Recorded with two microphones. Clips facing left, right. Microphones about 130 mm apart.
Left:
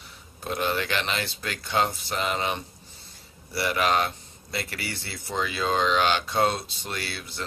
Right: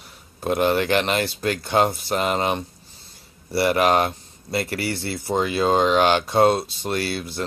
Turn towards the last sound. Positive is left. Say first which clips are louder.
# right 9 dB
turn(degrees=-50)  # may be behind; listen again after turning